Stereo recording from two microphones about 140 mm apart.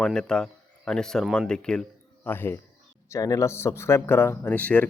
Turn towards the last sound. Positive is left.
turn(degrees=10)  # may be behind; listen again after turning